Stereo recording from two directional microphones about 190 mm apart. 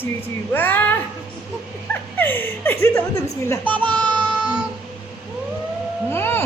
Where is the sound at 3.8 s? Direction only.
25° right (ahead or behind).